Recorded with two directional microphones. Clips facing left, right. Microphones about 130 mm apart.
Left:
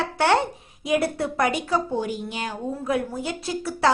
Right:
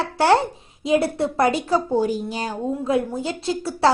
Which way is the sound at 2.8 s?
25° right (ahead or behind).